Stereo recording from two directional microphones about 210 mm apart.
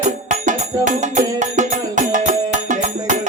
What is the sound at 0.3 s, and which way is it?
Music, 35° right (ahead or behind).